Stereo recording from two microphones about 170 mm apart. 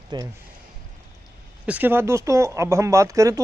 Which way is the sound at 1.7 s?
10° right (ahead or behind).